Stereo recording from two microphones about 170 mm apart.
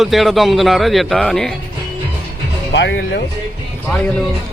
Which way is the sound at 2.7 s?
80° left.